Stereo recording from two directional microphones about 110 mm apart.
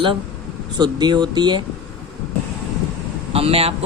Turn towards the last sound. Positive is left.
turn(degrees=-60)  # may be behind; listen again after turning